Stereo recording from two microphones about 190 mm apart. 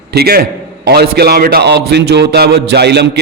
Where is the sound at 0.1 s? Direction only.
55° right (ahead or behind).